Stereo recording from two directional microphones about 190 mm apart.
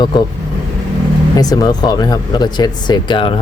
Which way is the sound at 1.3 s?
20° left (ahead or behind).